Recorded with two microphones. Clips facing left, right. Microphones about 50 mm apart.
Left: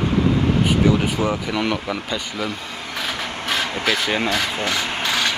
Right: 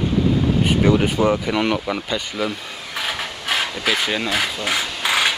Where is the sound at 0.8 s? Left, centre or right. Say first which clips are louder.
Right 2 dB; right.